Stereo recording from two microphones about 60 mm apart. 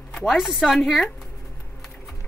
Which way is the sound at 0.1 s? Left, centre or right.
Centre.